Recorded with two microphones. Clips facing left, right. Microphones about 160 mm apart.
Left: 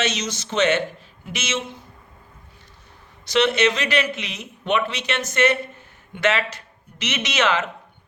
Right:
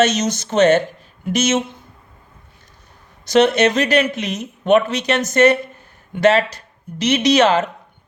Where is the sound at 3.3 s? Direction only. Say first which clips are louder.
Right 5 dB; 45° right (ahead or behind).